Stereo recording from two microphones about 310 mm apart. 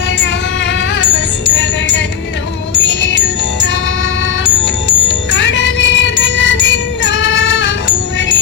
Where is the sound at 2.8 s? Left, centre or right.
Left.